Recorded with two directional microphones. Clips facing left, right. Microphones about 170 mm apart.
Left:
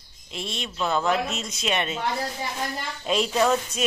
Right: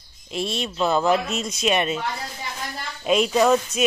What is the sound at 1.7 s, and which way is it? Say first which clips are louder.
Speech: right 5 dB; 20° right (ahead or behind).